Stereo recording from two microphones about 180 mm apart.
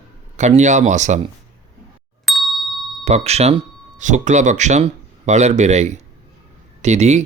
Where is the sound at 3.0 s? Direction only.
35° right (ahead or behind).